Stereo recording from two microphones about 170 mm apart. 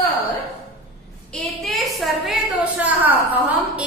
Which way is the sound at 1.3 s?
Centre (ahead or behind).